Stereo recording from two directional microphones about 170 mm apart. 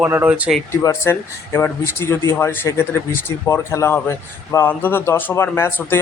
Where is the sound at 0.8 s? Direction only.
15° left (ahead or behind).